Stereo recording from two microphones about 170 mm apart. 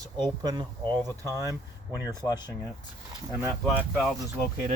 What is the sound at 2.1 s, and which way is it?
Speech, 25° left (ahead or behind).